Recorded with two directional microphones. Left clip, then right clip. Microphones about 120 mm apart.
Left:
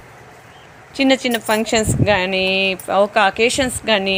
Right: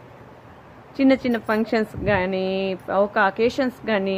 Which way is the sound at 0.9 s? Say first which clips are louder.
Left 3 dB; 10° left (ahead or behind).